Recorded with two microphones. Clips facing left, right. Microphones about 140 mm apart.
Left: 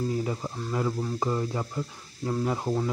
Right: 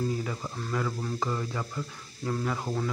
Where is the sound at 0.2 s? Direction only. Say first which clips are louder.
Left 3 dB; 25° left (ahead or behind).